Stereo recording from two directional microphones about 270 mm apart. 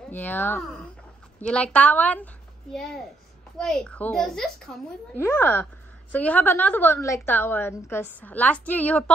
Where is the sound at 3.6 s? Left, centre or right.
Centre.